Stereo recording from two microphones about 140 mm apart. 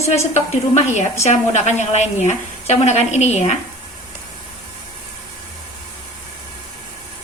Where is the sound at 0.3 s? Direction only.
55° left (ahead or behind).